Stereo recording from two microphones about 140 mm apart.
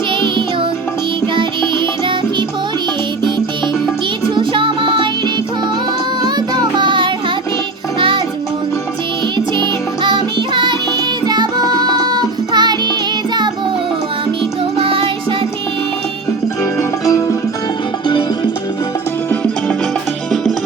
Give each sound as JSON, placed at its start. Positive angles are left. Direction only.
{"t": 4.4, "sound": "music", "side_deg": -35}
{"t": 6.2, "sound": "music", "side_deg": -30}
{"t": 9.6, "sound": "music", "side_deg": -35}
{"t": 14.8, "sound": "music", "side_deg": -40}
{"t": 17.1, "sound": "music", "side_deg": 20}